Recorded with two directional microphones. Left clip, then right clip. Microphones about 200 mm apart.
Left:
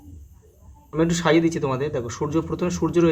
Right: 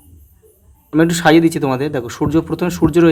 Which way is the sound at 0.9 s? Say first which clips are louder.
Right 8 dB; 45° right (ahead or behind).